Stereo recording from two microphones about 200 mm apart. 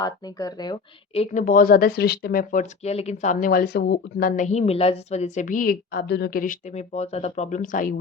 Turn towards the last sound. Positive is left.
turn(degrees=40)  # may be behind; listen again after turning